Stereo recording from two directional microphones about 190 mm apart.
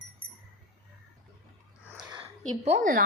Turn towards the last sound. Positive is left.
turn(degrees=-45)  # may be behind; listen again after turning